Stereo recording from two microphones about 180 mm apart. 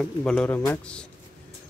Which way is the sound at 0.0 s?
5° left (ahead or behind).